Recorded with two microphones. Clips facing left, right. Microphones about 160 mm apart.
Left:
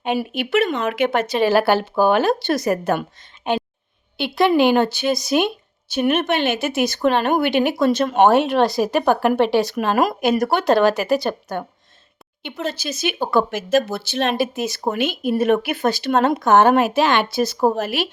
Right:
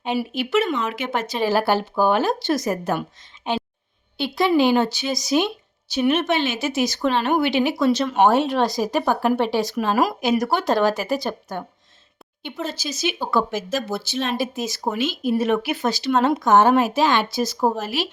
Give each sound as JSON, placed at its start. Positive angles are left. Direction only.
{"t": 0.0, "sound": "speech", "side_deg": 55}
{"t": 12.6, "sound": "speech", "side_deg": 60}